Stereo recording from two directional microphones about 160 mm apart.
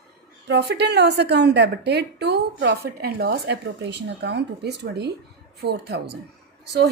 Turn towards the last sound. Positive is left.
turn(degrees=-90)